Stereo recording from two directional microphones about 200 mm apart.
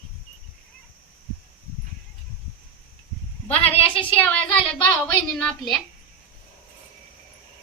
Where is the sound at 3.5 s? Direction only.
30° left (ahead or behind).